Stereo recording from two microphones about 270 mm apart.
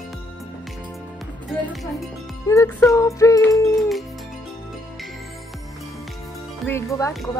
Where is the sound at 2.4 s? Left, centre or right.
Centre.